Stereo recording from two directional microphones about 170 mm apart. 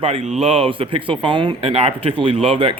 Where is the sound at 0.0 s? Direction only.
40° right (ahead or behind).